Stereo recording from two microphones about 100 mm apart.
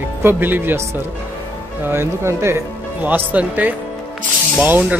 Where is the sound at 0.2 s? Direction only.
20° right (ahead or behind).